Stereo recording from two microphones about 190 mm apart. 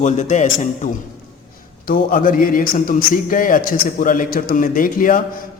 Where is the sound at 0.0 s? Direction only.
40° left (ahead or behind).